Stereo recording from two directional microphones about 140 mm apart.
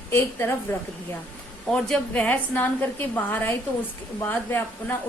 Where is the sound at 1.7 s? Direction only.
10° left (ahead or behind).